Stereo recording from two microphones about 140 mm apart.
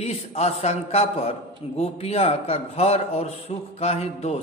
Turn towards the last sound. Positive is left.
turn(degrees=50)  # may be behind; listen again after turning